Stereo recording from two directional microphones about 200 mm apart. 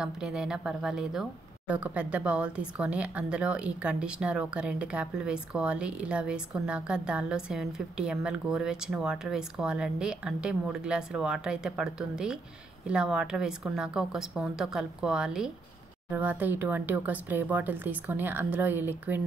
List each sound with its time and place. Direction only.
0.0 s speech: 5° right (ahead or behind)